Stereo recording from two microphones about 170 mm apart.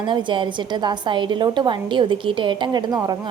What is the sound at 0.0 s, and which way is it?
A woman's voice, 30° right (ahead or behind).